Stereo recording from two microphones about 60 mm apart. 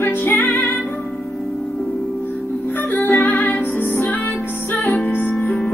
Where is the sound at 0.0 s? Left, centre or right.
Left.